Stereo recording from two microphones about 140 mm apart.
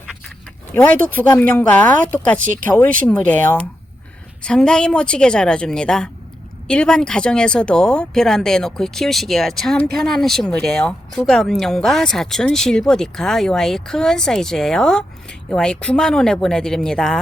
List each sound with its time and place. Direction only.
0.7 s speech: 10° left (ahead or behind)